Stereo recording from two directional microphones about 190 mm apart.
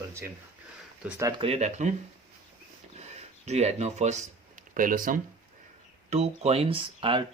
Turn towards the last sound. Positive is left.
turn(degrees=-25)  # may be behind; listen again after turning